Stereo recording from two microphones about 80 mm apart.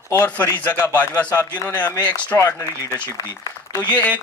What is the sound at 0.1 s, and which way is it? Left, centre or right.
A man's voice, centre.